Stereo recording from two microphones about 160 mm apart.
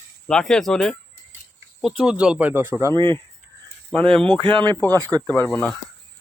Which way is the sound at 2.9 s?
30° right (ahead or behind).